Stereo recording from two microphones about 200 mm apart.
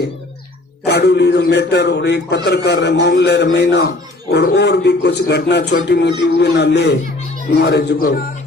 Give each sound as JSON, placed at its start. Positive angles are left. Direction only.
{"t": 0.9, "sound": "a man's voice", "side_deg": 55}